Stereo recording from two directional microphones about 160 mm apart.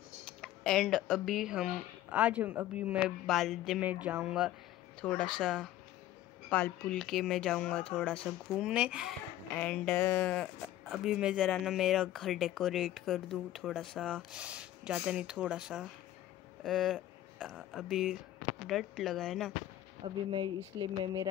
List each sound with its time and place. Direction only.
0.2 s speech: 5° left (ahead or behind)
5.0 s speech: 5° left (ahead or behind)
9.6 s speech: 10° left (ahead or behind)
14.3 s speech: 5° right (ahead or behind)
20.0 s speech: 30° right (ahead or behind)